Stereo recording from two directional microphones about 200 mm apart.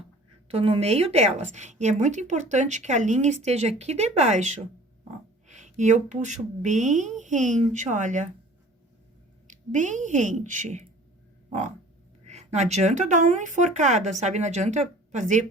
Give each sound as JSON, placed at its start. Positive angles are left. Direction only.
{"t": 0.5, "sound": "a woman's voice", "side_deg": -30}
{"t": 9.5, "sound": "a woman's voice", "side_deg": -40}
{"t": 12.2, "sound": "a woman's voice", "side_deg": -35}